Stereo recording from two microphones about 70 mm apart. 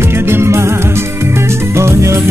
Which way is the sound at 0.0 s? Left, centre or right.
Right.